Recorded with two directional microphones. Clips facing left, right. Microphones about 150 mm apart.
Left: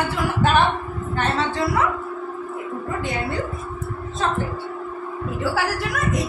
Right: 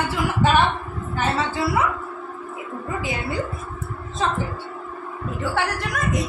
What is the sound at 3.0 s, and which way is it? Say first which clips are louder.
Speech: left 2 dB; 5° right (ahead or behind).